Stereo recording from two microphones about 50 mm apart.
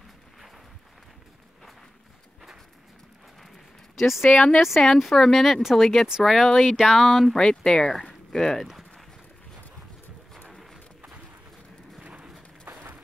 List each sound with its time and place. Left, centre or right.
3.9 s speech: centre
4.3 s a woman's voice: left
4.6 s speech: centre
7.3 s speech: centre
8.1 s a sound: centre
12.0 s horse: right
12.7 s a sound: right